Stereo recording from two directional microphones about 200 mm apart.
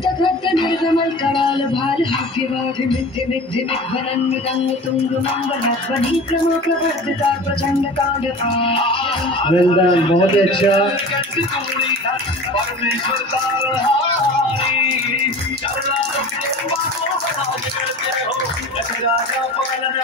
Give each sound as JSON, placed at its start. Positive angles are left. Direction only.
{"t": 0.2, "sound": "music", "side_deg": 25}
{"t": 8.5, "sound": "a man's voice", "side_deg": 25}